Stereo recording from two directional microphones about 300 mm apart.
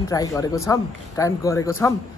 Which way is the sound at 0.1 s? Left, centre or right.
Centre.